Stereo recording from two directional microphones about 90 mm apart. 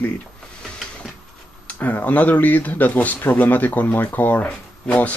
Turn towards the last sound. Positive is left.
turn(degrees=15)  # may be behind; listen again after turning